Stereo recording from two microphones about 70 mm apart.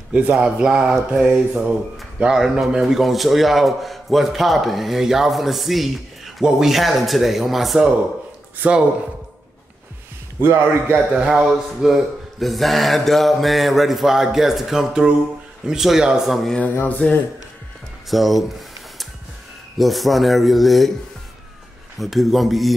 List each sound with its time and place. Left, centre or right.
0.1 s speech: centre
8.5 s speech: centre
10.4 s a man's voice: right
11.1 s speech: centre
16.8 s speech: left
18.1 s speech: centre
19.8 s speech: centre
22.0 s speech: centre